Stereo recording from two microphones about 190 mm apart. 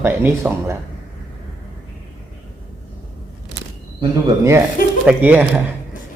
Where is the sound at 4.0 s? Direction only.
20° right (ahead or behind).